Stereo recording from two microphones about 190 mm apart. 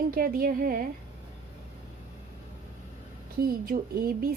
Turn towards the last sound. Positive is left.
turn(degrees=-50)  # may be behind; listen again after turning